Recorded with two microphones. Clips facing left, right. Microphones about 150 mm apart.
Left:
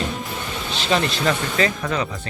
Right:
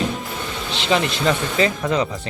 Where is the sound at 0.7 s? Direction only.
15° right (ahead or behind).